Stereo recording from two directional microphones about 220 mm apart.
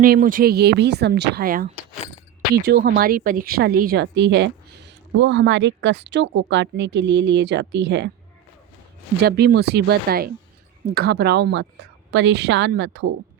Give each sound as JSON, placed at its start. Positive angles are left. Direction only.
{"t": 0.0, "sound": "speech", "side_deg": -40}
{"t": 9.2, "sound": "speech", "side_deg": -45}